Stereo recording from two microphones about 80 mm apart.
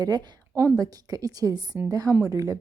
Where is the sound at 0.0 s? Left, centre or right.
Right.